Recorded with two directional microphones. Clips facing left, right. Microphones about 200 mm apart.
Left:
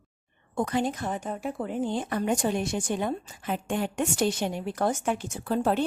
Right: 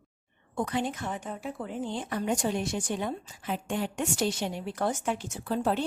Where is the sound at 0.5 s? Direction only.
45° left (ahead or behind).